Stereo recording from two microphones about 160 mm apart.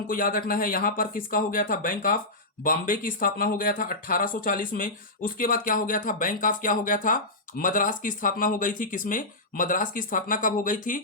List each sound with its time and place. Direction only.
0.1 s speech: 60° left (ahead or behind)